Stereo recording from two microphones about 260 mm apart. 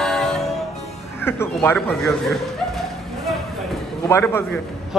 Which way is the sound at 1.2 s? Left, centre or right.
Centre.